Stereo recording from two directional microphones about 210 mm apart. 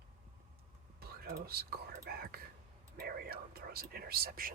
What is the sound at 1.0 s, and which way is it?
Speech, 45° right (ahead or behind).